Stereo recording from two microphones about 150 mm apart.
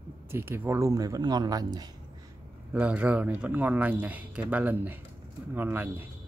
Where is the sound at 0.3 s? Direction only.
15° right (ahead or behind).